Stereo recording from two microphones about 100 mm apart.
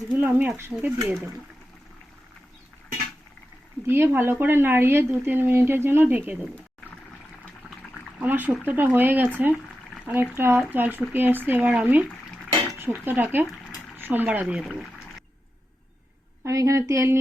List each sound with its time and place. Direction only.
0.1 s speech: 15° right (ahead or behind)
3.8 s speech: 20° right (ahead or behind)
8.2 s speech: 20° right (ahead or behind)
14.4 s speech: 5° right (ahead or behind)
16.4 s a woman's voice: 30° right (ahead or behind)